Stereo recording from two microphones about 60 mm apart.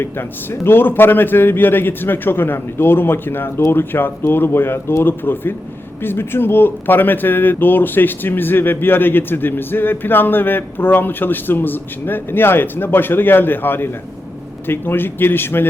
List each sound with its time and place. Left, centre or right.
0.0 s speech: left